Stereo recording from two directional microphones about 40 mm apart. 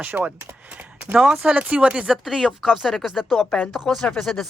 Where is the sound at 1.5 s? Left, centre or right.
Right.